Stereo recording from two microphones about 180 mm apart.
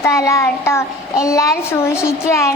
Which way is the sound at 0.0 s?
15° left (ahead or behind).